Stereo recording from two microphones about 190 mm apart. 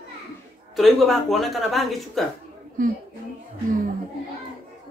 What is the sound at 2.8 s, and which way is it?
Speech, 45° right (ahead or behind).